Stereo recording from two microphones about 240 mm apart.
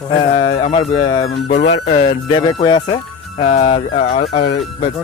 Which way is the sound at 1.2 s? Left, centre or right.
Left.